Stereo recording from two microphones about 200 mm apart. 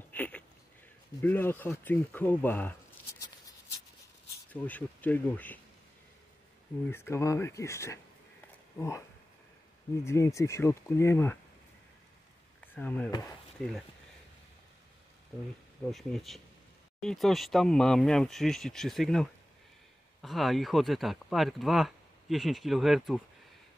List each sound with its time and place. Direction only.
0.1 s a sound: 10° left (ahead or behind)
1.2 s speech: 10° left (ahead or behind)
4.5 s speech: 10° left (ahead or behind)
6.9 s speech: 10° left (ahead or behind)
10.0 s speech: 15° left (ahead or behind)
12.5 s a sound: 10° left (ahead or behind)
13.6 s speech: 5° left (ahead or behind)
15.8 s speech: centre (ahead or behind)